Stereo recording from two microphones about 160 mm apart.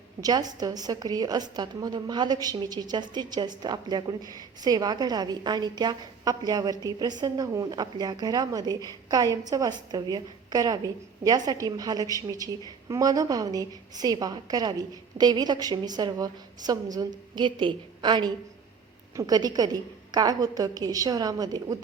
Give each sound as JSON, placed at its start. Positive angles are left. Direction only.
{"t": 0.2, "sound": "a woman's voice", "side_deg": -25}